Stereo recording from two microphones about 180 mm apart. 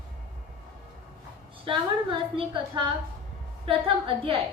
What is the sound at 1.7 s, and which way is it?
A woman's voice, 30° right (ahead or behind).